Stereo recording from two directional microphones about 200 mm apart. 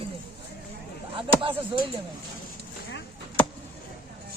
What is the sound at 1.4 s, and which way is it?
Speech, 25° right (ahead or behind).